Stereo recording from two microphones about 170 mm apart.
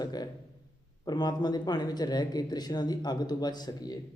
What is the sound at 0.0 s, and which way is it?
Speech, 25° left (ahead or behind).